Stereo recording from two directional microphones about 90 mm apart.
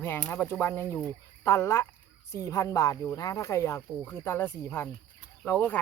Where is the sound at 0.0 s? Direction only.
25° left (ahead or behind).